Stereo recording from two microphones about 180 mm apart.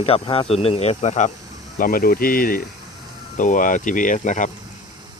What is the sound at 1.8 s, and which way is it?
Speech, 55° left (ahead or behind).